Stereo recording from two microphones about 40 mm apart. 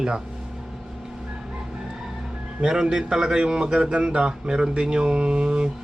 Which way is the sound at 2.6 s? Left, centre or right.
Centre.